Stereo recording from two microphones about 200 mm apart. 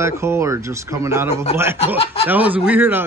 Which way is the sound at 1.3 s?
30° left (ahead or behind).